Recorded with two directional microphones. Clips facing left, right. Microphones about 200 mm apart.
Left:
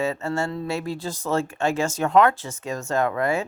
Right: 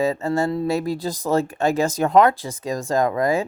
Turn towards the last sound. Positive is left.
turn(degrees=-35)  # may be behind; listen again after turning